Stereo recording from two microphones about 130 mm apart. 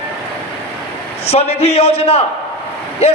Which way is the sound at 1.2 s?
50° left (ahead or behind).